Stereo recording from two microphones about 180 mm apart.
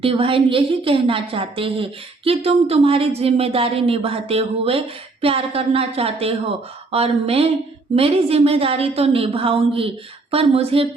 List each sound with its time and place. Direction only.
0.0 s a woman's voice: 30° right (ahead or behind)